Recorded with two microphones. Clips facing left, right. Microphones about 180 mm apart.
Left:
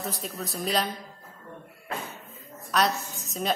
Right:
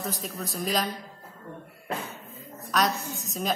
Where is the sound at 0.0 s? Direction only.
Centre (ahead or behind).